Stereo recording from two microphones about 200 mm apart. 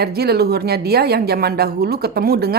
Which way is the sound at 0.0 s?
50° right (ahead or behind).